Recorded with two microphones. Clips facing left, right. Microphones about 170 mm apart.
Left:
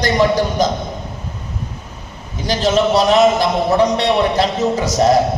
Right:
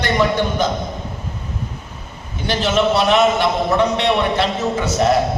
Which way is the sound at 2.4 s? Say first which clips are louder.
Left 2 dB; 40° left (ahead or behind).